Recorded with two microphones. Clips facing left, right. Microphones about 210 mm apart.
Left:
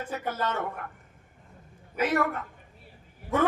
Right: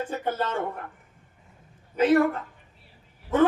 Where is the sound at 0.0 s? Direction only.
30° right (ahead or behind).